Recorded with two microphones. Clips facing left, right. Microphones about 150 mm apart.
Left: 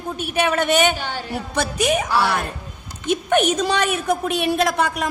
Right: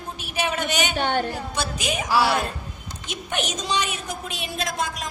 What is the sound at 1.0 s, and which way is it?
Speech, 60° right (ahead or behind).